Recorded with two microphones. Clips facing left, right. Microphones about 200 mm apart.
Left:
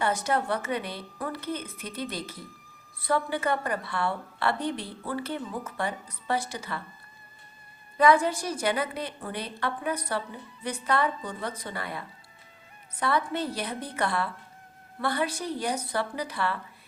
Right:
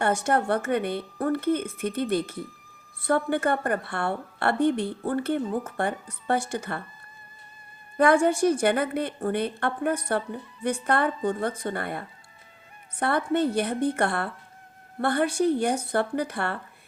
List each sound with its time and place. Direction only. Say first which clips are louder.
0.0 s a woman's voice: right 3 dB; 55° right (ahead or behind)
7.9 s a woman's voice: right 2 dB; 50° right (ahead or behind)